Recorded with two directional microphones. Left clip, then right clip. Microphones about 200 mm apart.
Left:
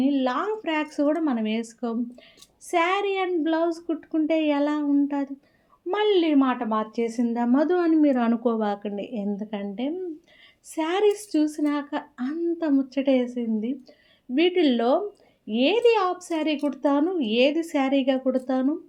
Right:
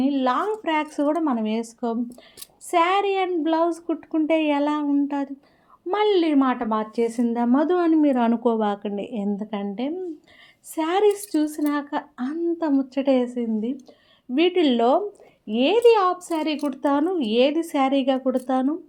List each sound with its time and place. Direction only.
0.0 s speech: 30° right (ahead or behind)